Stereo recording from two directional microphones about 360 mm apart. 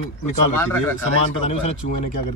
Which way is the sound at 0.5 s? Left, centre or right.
Centre.